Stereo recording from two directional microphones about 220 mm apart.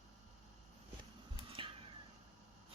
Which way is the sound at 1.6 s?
25° right (ahead or behind).